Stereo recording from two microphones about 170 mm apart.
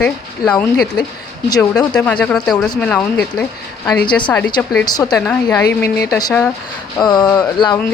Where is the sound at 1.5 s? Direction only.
20° left (ahead or behind).